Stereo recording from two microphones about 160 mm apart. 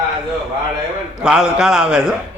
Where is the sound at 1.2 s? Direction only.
5° right (ahead or behind).